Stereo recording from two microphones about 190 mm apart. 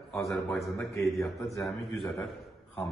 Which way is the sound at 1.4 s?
15° left (ahead or behind).